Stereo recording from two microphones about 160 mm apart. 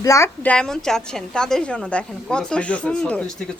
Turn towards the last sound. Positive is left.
turn(degrees=10)  # may be behind; listen again after turning